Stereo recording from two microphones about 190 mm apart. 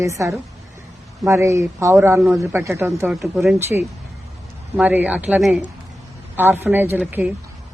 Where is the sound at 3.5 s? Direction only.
15° right (ahead or behind).